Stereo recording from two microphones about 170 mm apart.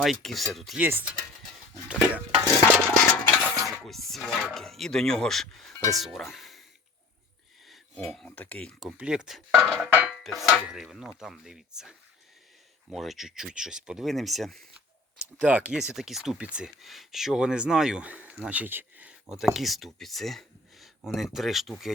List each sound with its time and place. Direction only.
0.0 s speech: centre (ahead or behind)
0.8 s speech: 10° right (ahead or behind)
2.4 s stir: 15° left (ahead or behind)
3.1 s a sound: 10° left (ahead or behind)
3.8 s speech: centre (ahead or behind)
7.7 s speech: centre (ahead or behind)